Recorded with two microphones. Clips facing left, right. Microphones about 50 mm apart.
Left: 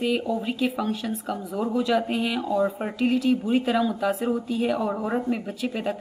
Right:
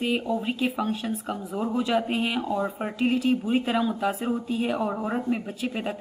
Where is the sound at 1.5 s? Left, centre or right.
Centre.